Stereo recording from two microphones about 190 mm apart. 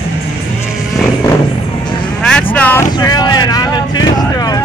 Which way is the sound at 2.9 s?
20° left (ahead or behind).